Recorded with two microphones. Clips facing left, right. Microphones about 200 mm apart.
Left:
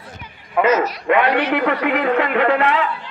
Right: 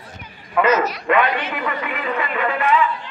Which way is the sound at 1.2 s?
70° left (ahead or behind).